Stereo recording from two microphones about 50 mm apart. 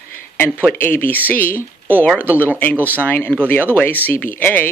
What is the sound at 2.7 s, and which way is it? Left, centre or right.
Speech, right.